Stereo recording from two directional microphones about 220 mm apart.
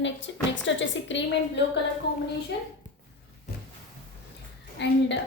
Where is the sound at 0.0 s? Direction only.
55° left (ahead or behind).